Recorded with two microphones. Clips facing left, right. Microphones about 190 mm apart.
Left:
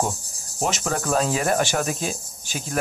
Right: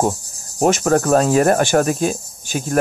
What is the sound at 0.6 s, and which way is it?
Speech, 55° right (ahead or behind).